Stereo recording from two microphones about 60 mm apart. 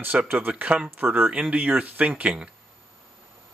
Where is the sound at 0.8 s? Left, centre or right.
Right.